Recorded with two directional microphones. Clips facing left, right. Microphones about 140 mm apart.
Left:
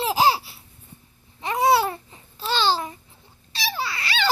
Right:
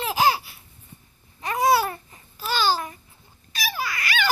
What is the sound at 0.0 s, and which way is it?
Baby laughter, 30° left (ahead or behind).